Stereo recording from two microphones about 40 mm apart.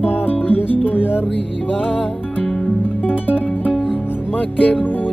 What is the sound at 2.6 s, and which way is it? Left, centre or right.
Music, left.